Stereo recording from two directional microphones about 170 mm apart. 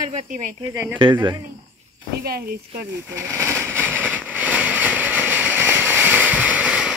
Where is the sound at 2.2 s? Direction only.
65° right (ahead or behind).